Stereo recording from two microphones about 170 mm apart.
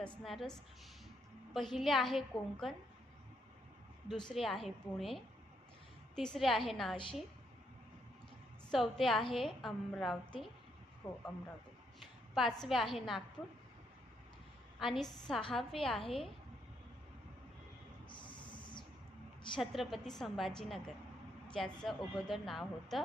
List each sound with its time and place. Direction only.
0.0 s speech: centre (ahead or behind)
4.1 s speech: centre (ahead or behind)
8.7 s speech: centre (ahead or behind)
11.0 s speech: 20° left (ahead or behind)
12.3 s speech: centre (ahead or behind)
14.8 s speech: centre (ahead or behind)
18.1 s a sound: 30° left (ahead or behind)
19.5 s speech: centre (ahead or behind)